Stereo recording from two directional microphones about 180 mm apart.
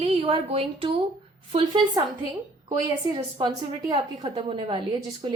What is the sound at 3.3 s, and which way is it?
A woman's voice, 25° right (ahead or behind).